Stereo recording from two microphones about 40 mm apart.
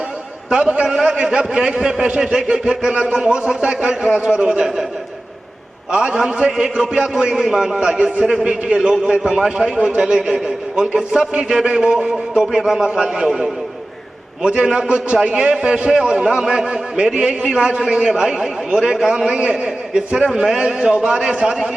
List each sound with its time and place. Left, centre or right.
0.9 s speech: centre
5.9 s a man's voice: right
7.8 s a man's voice: right
14.6 s a man's voice: right
17.2 s speech: right